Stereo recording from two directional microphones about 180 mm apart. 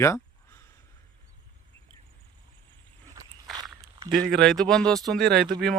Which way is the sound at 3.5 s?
20° right (ahead or behind).